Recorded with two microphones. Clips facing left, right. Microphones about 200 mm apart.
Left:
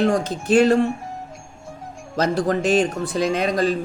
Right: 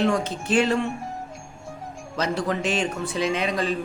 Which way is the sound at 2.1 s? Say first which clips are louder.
Left 5 dB; 40° left (ahead or behind).